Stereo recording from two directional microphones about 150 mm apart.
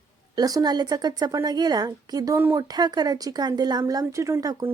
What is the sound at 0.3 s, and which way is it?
A woman's voice, 25° right (ahead or behind).